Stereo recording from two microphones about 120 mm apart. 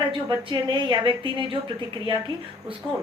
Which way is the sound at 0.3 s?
35° right (ahead or behind).